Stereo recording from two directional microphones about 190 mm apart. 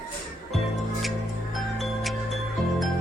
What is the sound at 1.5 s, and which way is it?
Music, centre (ahead or behind).